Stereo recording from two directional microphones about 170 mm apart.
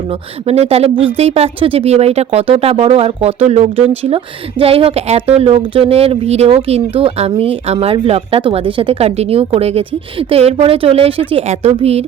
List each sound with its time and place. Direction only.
0.4 s speech: 35° right (ahead or behind)